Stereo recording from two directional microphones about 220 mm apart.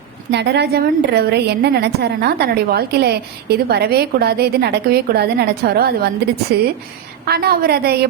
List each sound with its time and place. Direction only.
0.3 s a woman's voice: 50° right (ahead or behind)